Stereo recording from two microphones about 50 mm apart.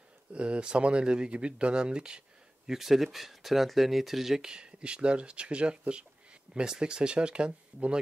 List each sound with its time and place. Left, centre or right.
0.3 s speech: right; by 4.5 s centre
4.5 s speech: centre